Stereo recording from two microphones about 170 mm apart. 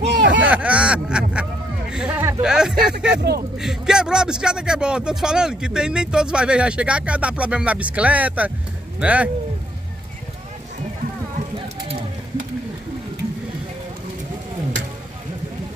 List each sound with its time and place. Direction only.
0.0 s a sound: 85° right
0.5 s speech: 5° right (ahead or behind)
1.3 s a sound: 5° right (ahead or behind)
2.4 s a man's voice: 5° right (ahead or behind)
3.2 s speech: 70° right (ahead or behind)
3.5 s a man's voice: 5° right (ahead or behind)